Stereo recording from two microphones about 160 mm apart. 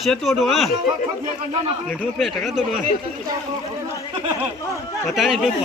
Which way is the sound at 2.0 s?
Centre (ahead or behind).